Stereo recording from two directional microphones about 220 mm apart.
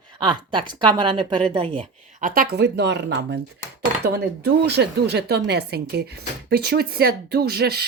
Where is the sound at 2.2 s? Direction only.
40° right (ahead or behind).